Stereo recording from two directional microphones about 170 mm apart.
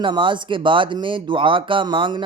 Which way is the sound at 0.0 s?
30° right (ahead or behind).